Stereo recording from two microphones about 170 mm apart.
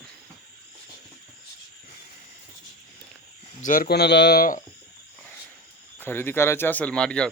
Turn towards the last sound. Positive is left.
turn(degrees=5)  # may be behind; listen again after turning